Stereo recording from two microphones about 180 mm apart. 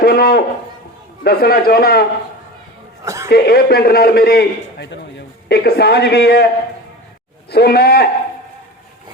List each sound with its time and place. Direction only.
0.0 s a man's voice: 60° left (ahead or behind)
3.0 s a sound: 15° right (ahead or behind)
3.2 s a man's voice: 60° left (ahead or behind)
7.5 s a man's voice: 60° left (ahead or behind)